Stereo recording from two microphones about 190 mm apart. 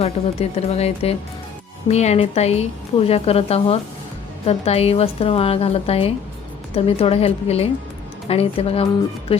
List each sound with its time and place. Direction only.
0.0 s a woman's voice: 35° left (ahead or behind)